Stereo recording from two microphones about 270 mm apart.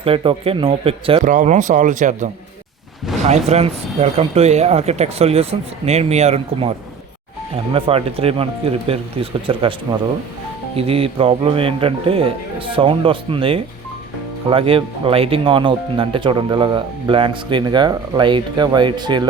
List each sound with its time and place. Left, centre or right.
0.0 s speech: centre
10.8 s speech: right